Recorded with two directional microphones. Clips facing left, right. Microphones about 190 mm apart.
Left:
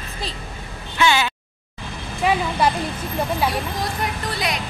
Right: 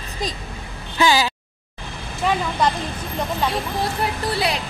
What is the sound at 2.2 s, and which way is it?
Speech, 10° left (ahead or behind).